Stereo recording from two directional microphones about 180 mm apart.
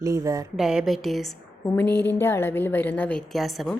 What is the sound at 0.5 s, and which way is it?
A woman's voice, 5° right (ahead or behind).